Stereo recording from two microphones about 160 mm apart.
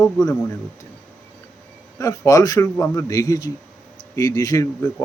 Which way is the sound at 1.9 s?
20° left (ahead or behind).